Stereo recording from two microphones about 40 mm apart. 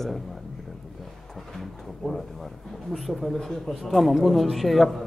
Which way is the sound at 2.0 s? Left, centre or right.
Centre.